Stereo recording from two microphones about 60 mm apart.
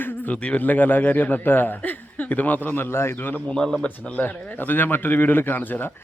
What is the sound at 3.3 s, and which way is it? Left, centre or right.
Speech, centre.